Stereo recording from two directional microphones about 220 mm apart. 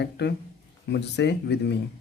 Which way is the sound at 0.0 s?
50° left (ahead or behind).